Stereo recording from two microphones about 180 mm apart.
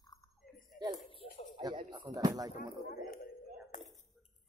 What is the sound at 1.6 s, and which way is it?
Speech, 25° right (ahead or behind).